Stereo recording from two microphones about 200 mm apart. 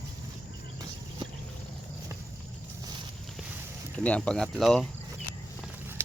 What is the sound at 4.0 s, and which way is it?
Speech, 5° left (ahead or behind).